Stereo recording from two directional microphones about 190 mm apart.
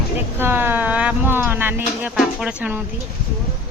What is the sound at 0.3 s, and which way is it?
A woman's voice, 10° right (ahead or behind).